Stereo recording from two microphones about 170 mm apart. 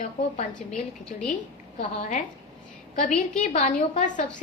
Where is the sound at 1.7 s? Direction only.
40° left (ahead or behind).